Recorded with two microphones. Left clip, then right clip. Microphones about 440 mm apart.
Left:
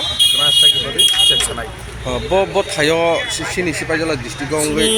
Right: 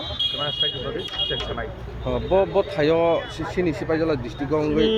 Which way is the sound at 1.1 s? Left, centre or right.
Right.